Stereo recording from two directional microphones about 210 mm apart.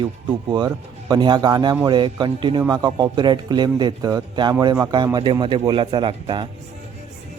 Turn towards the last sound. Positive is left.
turn(degrees=-25)  # may be behind; listen again after turning